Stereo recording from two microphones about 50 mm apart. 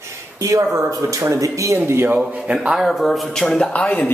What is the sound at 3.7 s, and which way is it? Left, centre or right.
Speech, left.